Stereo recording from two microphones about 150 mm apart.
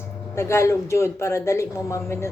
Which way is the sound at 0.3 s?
20° left (ahead or behind).